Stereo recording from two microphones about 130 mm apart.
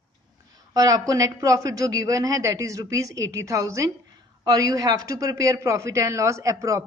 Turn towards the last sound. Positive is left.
turn(degrees=-25)  # may be behind; listen again after turning